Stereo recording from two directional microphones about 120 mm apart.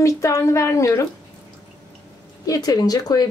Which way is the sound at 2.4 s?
30° left (ahead or behind).